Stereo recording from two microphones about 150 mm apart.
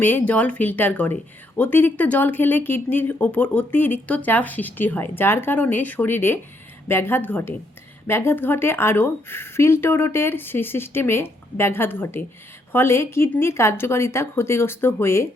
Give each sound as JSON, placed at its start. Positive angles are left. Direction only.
{"t": 0.0, "sound": "speech", "side_deg": 10}